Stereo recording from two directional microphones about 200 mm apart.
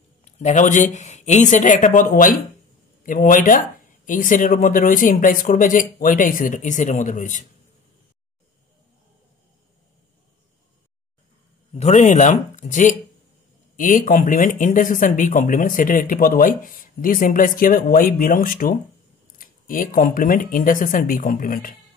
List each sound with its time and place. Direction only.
0.2 s speech: 35° left (ahead or behind)
11.7 s speech: 35° left (ahead or behind)